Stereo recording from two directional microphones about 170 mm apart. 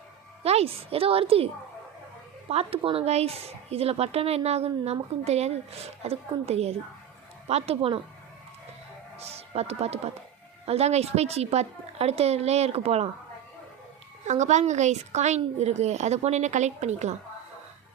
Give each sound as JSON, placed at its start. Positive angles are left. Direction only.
{"t": 0.4, "sound": "speech", "side_deg": -35}
{"t": 2.5, "sound": "speech", "side_deg": -35}
{"t": 9.1, "sound": "speech", "side_deg": -35}
{"t": 14.3, "sound": "a woman's voice", "side_deg": -45}